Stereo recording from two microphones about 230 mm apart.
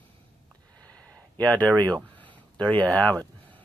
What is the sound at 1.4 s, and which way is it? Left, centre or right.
Speech, centre.